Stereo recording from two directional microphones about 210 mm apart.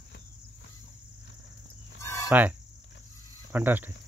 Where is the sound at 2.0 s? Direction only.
15° left (ahead or behind).